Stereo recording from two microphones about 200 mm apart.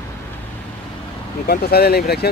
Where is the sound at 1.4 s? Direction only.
50° left (ahead or behind).